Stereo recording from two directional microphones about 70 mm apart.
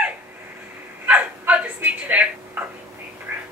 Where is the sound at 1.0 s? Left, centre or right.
Right.